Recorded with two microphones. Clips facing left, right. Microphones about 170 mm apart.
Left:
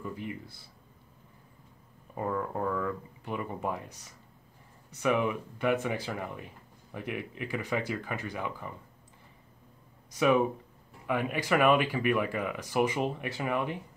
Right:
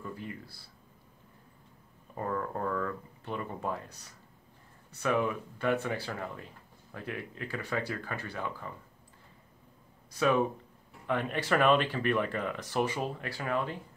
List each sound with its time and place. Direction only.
0.0 s speech: 15° left (ahead or behind)
2.1 s speech: 10° left (ahead or behind)
10.1 s speech: 15° left (ahead or behind)